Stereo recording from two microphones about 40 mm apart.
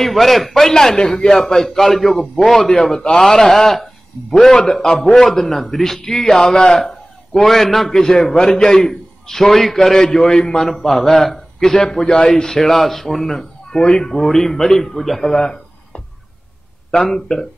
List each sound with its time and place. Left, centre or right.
0.0 s a man's voice: centre